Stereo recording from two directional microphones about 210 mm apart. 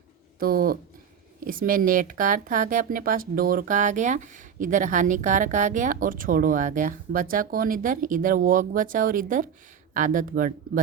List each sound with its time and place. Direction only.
0.3 s speech: 45° right (ahead or behind)